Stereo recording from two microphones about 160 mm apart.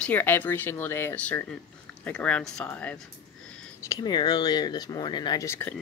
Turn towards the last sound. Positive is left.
turn(degrees=15)  # may be behind; listen again after turning